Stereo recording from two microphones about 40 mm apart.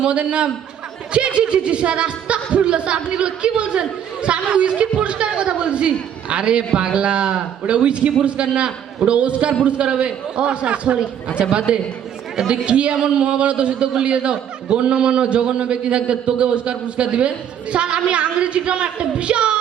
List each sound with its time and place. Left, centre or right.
0.0 s a man's voice: right
12.4 s speech: centre
12.6 s a man's voice: right